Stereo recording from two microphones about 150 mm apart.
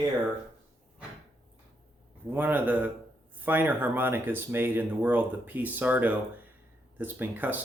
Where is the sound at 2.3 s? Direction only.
15° right (ahead or behind).